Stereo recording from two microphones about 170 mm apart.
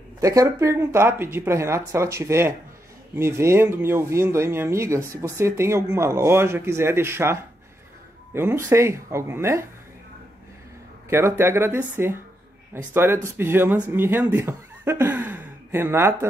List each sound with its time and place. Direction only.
0.2 s speech: 20° right (ahead or behind)
11.1 s speech: 15° right (ahead or behind)